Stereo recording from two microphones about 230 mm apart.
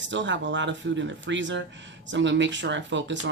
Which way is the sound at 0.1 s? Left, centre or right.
Right.